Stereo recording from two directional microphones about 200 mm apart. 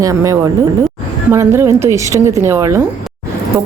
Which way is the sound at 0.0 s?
15° right (ahead or behind).